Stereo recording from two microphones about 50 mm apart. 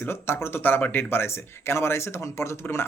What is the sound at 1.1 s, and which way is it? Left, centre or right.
Speech, left.